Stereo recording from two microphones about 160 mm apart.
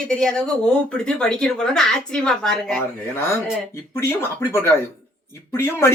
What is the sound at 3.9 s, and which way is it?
Speech, 15° left (ahead or behind).